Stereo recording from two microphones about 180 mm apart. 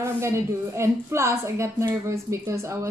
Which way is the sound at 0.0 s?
15° right (ahead or behind).